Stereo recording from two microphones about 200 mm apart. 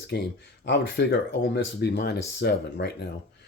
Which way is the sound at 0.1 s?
55° left (ahead or behind).